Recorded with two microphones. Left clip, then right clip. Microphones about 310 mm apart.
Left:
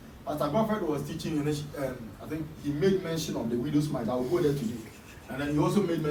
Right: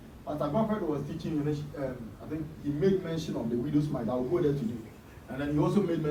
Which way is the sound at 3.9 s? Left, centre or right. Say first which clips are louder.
Left 1 dB; centre.